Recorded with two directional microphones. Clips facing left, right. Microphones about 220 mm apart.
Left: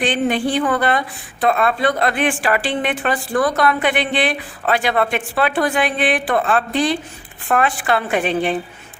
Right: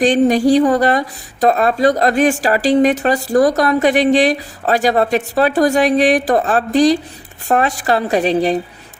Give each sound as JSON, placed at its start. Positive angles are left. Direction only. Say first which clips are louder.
{"t": 0.0, "sound": "a woman's voice", "louder": "right 7 dB", "side_deg": -40}